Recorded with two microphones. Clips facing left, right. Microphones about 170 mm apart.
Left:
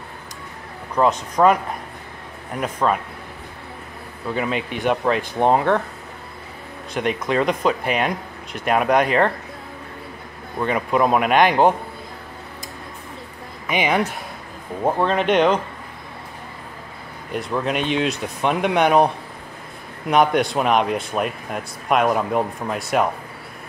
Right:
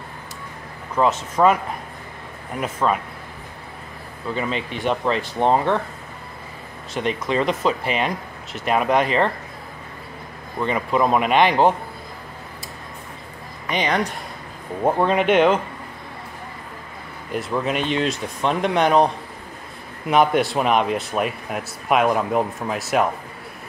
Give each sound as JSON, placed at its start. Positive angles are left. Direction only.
{"t": 0.9, "sound": "speech", "side_deg": 0}
{"t": 2.6, "sound": "speech", "side_deg": -5}
{"t": 4.4, "sound": "speech", "side_deg": 5}
{"t": 6.9, "sound": "speech", "side_deg": 0}
{"t": 10.6, "sound": "speech", "side_deg": 5}
{"t": 13.7, "sound": "speech", "side_deg": 5}
{"t": 14.8, "sound": "speech", "side_deg": -10}
{"t": 17.3, "sound": "speech", "side_deg": 0}
{"t": 20.1, "sound": "speech", "side_deg": 0}